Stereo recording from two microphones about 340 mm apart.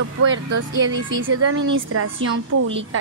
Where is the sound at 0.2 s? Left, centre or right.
Right.